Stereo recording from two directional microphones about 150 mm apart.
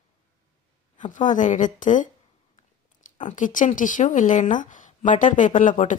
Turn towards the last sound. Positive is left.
turn(degrees=55)  # may be behind; listen again after turning